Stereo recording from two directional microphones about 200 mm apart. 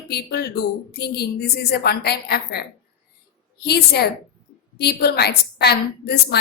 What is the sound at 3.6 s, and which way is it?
A woman's voice, 55° left (ahead or behind).